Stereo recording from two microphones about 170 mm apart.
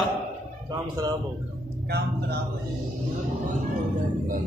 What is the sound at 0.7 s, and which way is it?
Speech, 25° right (ahead or behind).